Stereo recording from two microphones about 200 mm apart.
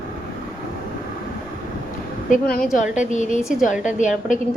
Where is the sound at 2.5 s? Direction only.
45° left (ahead or behind).